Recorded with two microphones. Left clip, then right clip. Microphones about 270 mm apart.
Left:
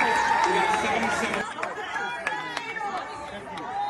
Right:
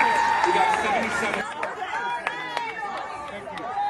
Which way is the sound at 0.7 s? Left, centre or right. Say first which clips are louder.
Right 1 dB; right.